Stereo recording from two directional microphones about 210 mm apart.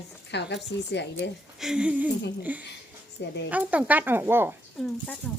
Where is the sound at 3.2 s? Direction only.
55° left (ahead or behind).